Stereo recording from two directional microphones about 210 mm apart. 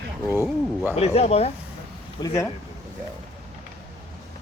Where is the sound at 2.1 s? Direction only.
15° left (ahead or behind).